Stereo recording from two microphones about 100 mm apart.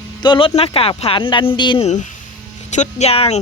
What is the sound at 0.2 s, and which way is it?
Speech, 55° left (ahead or behind).